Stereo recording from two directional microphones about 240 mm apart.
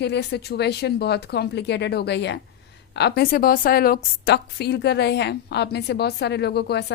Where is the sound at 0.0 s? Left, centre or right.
Left.